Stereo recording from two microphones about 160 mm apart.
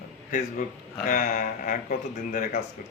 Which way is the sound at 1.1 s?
50° left (ahead or behind).